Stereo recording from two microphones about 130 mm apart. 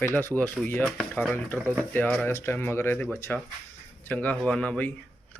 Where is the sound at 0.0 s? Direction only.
15° left (ahead or behind).